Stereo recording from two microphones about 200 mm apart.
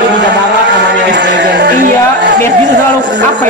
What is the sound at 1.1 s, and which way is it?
Music, 60° right (ahead or behind).